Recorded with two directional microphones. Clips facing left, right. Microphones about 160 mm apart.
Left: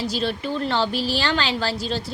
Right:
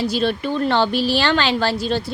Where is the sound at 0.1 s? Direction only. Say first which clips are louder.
Right 4 dB; 60° right (ahead or behind).